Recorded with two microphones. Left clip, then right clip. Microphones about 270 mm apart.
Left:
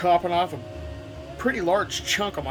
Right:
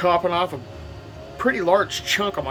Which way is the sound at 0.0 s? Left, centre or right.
Centre.